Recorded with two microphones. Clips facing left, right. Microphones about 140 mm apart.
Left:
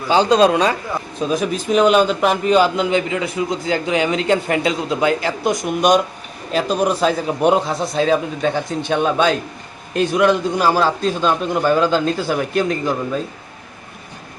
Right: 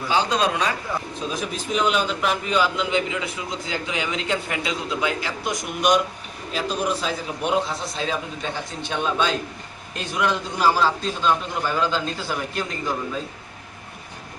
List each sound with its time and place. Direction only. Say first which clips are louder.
0.3 s a man's voice: left 9 dB; 30° left (ahead or behind)
1.3 s a man's voice: left 9 dB; 50° left (ahead or behind); by 6.0 s 35° left (ahead or behind)
6.5 s a man's voice: left 7 dB; 50° left (ahead or behind)